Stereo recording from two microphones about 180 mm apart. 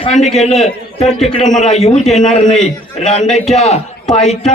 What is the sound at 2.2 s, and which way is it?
A man's voice, 40° left (ahead or behind).